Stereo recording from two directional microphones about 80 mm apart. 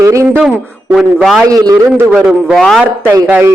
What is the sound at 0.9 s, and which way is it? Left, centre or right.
Speech, centre.